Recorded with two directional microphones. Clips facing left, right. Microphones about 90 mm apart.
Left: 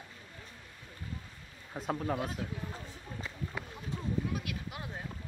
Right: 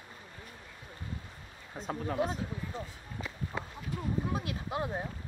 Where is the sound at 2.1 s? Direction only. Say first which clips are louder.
Right 5 dB; 30° right (ahead or behind).